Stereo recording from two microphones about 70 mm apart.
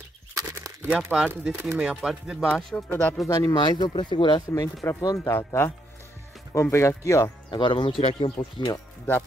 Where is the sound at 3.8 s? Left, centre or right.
Left.